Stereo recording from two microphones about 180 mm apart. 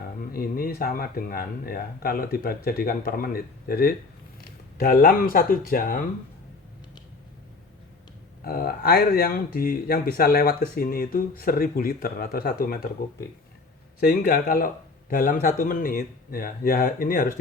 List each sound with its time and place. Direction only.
0.3 s speech: 55° left (ahead or behind)
8.4 s speech: 60° left (ahead or behind)
14.0 s speech: 55° left (ahead or behind)